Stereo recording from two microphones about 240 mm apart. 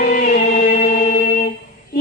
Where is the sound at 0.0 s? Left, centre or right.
Left.